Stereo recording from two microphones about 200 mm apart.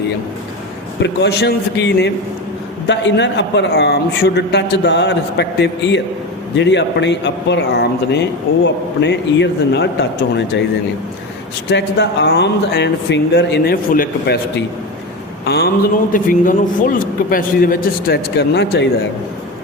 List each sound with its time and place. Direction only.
0.9 s a man's voice: 60° left (ahead or behind)
11.7 s a man's voice: 60° left (ahead or behind)
15.4 s a man's voice: 50° left (ahead or behind)
16.1 s a man's voice: 40° left (ahead or behind); by 18.9 s 60° left (ahead or behind)